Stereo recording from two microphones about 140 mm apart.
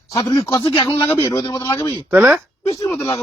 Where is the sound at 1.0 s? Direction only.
20° left (ahead or behind).